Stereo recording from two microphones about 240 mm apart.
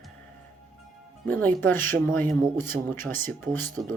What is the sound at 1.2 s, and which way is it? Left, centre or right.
Speech, centre.